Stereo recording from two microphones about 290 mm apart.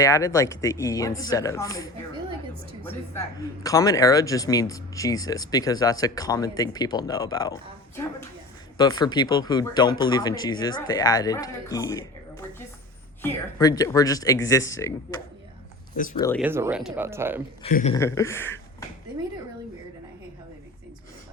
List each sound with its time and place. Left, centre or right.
0.0 s speech: centre
3.6 s speech: centre
16.1 s speech: centre
16.4 s speech: centre
17.6 s a man's voice: left
17.9 s speech: centre